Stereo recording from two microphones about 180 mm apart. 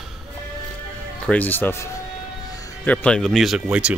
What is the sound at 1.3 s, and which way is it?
Speech, 10° left (ahead or behind).